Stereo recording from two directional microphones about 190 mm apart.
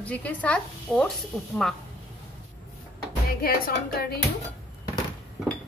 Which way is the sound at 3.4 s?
50° left (ahead or behind).